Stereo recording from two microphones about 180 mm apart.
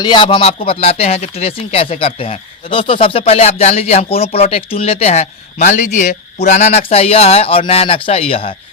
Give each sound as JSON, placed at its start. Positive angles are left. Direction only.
{"t": 0.0, "sound": "speech", "side_deg": 25}